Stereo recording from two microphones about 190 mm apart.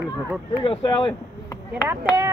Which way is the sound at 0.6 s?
25° left (ahead or behind).